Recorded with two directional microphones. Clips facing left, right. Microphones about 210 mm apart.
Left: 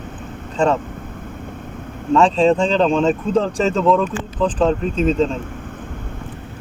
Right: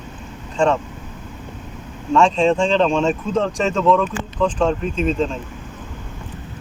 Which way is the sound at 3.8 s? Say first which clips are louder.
Right 2 dB; centre (ahead or behind).